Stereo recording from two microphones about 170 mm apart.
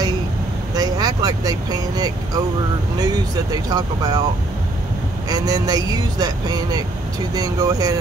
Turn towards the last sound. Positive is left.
turn(degrees=-20)  # may be behind; listen again after turning